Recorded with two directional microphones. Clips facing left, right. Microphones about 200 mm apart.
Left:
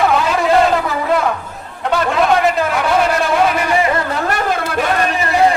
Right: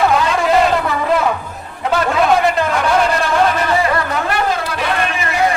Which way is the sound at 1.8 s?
Centre (ahead or behind).